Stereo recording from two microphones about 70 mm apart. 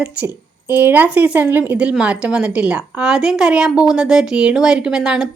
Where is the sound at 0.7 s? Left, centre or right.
Right.